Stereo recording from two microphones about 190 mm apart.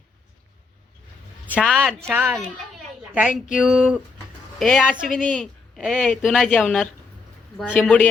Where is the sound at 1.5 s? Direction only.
Centre (ahead or behind).